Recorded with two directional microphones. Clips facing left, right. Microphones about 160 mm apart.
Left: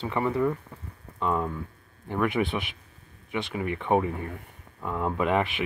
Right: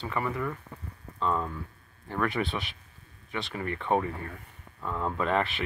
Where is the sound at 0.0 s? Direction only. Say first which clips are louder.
Left 6 dB; 20° left (ahead or behind).